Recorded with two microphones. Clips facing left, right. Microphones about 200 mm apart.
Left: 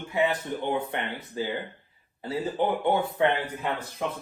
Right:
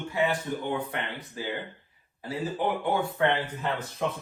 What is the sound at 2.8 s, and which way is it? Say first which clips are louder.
Speech: left 1 dB; 15° left (ahead or behind).